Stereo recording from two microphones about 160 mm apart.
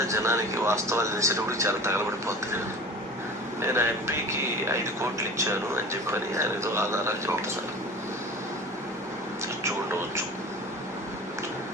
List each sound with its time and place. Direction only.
0.1 s speech: 15° right (ahead or behind)
3.7 s speech: 15° right (ahead or behind)
5.4 s speech: 15° right (ahead or behind)